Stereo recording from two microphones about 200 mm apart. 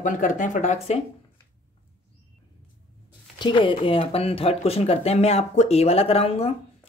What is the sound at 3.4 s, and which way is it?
Speech, 25° left (ahead or behind).